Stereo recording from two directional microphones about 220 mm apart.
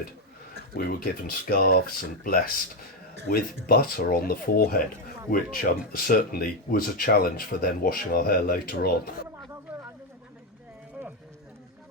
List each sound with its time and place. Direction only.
0.9 s speech: 40° left (ahead or behind)